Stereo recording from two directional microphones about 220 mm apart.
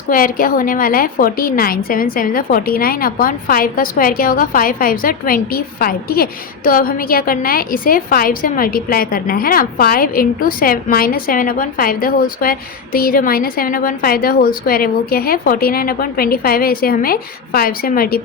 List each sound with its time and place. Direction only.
0.1 s a woman's voice: 40° left (ahead or behind)